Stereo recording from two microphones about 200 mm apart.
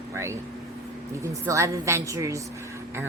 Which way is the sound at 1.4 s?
15° right (ahead or behind).